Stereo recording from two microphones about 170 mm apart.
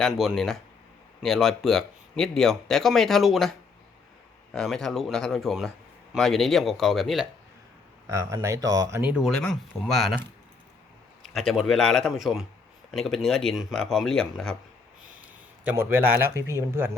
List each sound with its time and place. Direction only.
0.0 s speech: centre (ahead or behind)
4.5 s speech: 5° left (ahead or behind)
8.0 s speech: 20° right (ahead or behind)
9.0 s speech: 5° right (ahead or behind)
15.6 s a man's voice: 15° right (ahead or behind)